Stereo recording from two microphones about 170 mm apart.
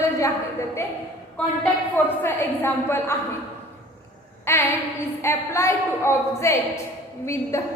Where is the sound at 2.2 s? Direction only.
15° left (ahead or behind).